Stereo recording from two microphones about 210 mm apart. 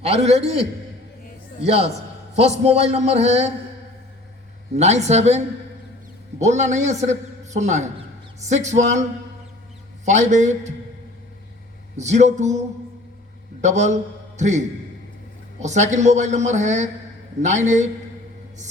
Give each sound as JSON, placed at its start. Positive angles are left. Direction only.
{"t": 0.0, "sound": "a man's voice", "side_deg": -30}
{"t": 1.6, "sound": "a man's voice", "side_deg": -30}
{"t": 4.8, "sound": "a man's voice", "side_deg": -30}
{"t": 6.4, "sound": "a man's voice", "side_deg": -35}
{"t": 10.1, "sound": "a man's voice", "side_deg": -35}
{"t": 11.9, "sound": "a man's voice", "side_deg": -35}
{"t": 13.6, "sound": "a man's voice", "side_deg": -35}
{"t": 15.6, "sound": "a man's voice", "side_deg": -35}